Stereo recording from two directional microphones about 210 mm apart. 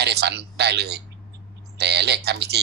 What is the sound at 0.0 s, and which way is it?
A man's voice, 50° right (ahead or behind).